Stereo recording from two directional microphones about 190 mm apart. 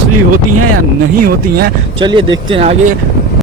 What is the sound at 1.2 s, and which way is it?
Speech, 55° right (ahead or behind).